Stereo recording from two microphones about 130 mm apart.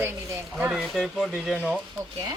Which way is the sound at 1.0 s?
Centre (ahead or behind).